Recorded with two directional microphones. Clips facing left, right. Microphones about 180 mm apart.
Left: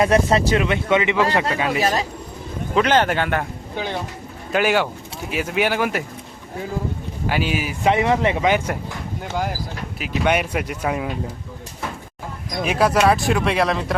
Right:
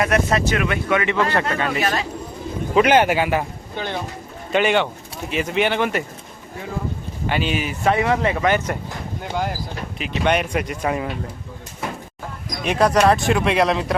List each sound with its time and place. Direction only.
0.0 s speech: 25° left (ahead or behind); by 1.8 s 10° left (ahead or behind)
2.7 s speech: 10° right (ahead or behind)
3.8 s speech: 5° left (ahead or behind)
7.3 s speech: 5° left (ahead or behind)
7.9 s speech: 20° left (ahead or behind); by 11.1 s 5° left (ahead or behind)
12.6 s speech: 5° left (ahead or behind)